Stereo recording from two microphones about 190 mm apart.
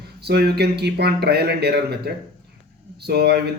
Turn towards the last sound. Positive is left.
turn(degrees=-60)  # may be behind; listen again after turning